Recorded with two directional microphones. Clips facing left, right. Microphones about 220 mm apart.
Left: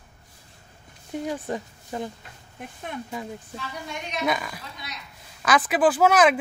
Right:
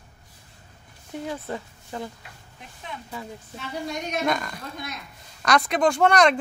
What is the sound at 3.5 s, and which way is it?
Speech, 35° right (ahead or behind).